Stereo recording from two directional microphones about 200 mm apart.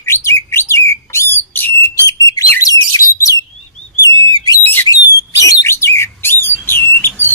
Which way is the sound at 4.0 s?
20° left (ahead or behind).